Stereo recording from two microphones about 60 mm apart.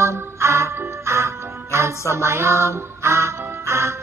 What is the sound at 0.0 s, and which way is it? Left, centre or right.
Music, right.